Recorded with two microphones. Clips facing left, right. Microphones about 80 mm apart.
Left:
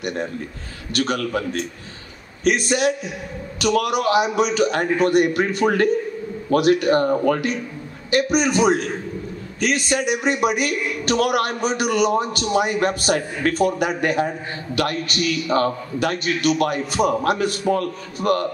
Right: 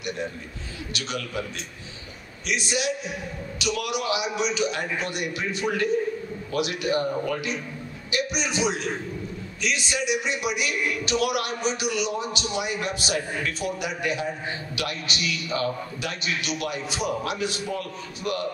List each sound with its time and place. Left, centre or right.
0.9 s a man's voice: left